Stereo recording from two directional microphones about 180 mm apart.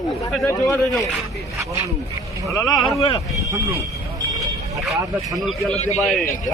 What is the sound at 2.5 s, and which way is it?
Speech, 20° left (ahead or behind).